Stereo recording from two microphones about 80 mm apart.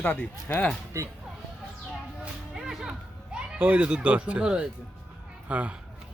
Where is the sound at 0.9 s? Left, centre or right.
Right.